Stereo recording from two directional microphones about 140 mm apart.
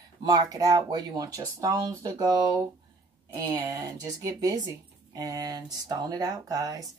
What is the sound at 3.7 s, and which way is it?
Speech, 25° right (ahead or behind).